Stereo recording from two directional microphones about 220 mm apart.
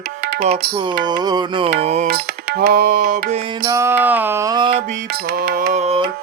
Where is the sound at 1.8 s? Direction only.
30° right (ahead or behind).